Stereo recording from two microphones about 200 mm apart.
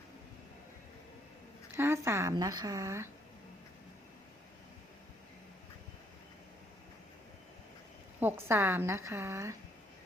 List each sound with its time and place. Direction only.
1.7 s a woman's voice: 15° right (ahead or behind)
8.2 s a woman's voice: 10° right (ahead or behind)